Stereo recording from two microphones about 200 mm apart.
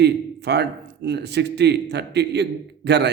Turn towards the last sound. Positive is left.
turn(degrees=-60)  # may be behind; listen again after turning